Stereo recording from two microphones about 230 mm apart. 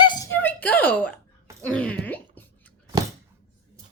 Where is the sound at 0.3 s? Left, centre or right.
Centre.